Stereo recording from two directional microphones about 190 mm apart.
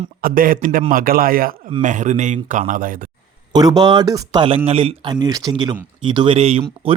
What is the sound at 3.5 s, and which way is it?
Speech, 20° right (ahead or behind).